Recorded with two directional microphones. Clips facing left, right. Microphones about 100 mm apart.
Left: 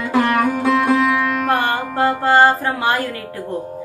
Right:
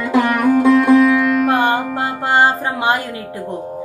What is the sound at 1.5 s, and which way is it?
Music, 20° right (ahead or behind).